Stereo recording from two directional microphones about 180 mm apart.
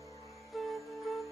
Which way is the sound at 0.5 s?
Centre (ahead or behind).